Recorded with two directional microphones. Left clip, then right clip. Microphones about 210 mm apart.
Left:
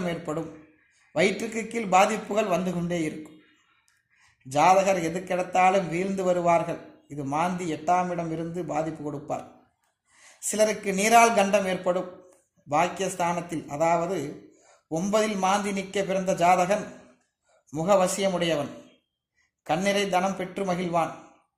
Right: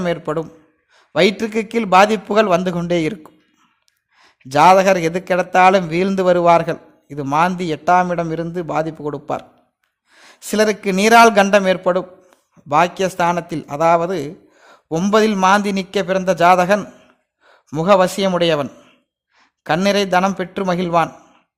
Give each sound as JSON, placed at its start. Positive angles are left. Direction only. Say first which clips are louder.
{"t": 0.0, "sound": "a man's voice", "louder": "right 10 dB", "side_deg": -35}
{"t": 4.4, "sound": "a man's voice", "louder": "right 9 dB", "side_deg": -35}
{"t": 10.5, "sound": "a man's voice", "louder": "right 8 dB", "side_deg": -35}